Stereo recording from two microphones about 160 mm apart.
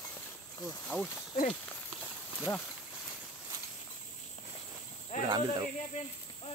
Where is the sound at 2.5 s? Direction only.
15° left (ahead or behind).